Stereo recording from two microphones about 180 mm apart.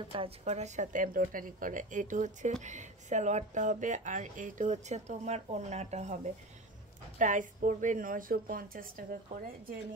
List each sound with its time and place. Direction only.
0.1 s a woman's voice: 35° right (ahead or behind); by 9.4 s 50° right (ahead or behind)